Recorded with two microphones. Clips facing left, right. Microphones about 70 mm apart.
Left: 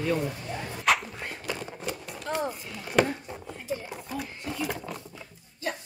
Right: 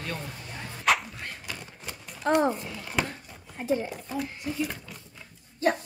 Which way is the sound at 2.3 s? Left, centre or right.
Right.